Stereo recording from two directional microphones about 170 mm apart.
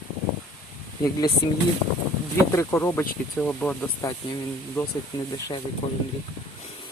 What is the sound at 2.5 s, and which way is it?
Speech, 15° left (ahead or behind).